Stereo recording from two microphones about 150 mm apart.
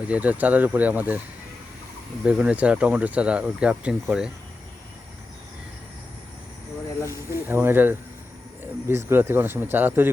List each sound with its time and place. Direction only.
0.1 s speech: 10° right (ahead or behind)
2.2 s speech: 10° right (ahead or behind)
7.0 s snake: 20° left (ahead or behind)
7.4 s speech: 15° right (ahead or behind)